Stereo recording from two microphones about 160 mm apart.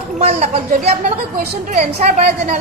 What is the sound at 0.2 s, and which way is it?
A woman's voice, 45° right (ahead or behind).